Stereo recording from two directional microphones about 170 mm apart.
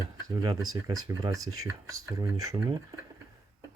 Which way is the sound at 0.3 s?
20° right (ahead or behind).